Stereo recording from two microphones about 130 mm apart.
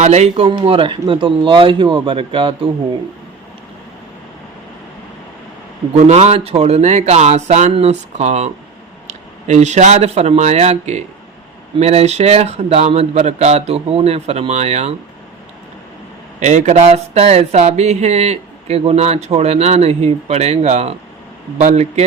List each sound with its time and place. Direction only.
0.0 s speech: 60° right (ahead or behind)
0.4 s speech: 40° right (ahead or behind)
6.1 s speech: 55° right (ahead or behind)
16.4 s speech: 65° right (ahead or behind)
16.8 s speech: 55° right (ahead or behind)